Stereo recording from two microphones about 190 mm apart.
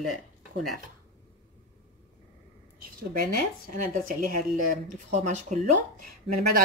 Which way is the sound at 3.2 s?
45° right (ahead or behind).